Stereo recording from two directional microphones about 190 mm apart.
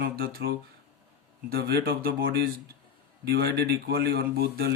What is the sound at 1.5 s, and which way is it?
Speech, 55° right (ahead or behind).